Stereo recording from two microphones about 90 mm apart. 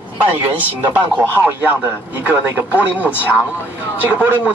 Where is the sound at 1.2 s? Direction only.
20° left (ahead or behind).